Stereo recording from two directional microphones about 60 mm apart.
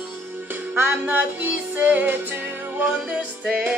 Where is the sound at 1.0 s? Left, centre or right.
Right.